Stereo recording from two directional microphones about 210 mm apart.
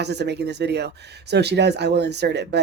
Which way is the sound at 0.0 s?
55° right (ahead or behind).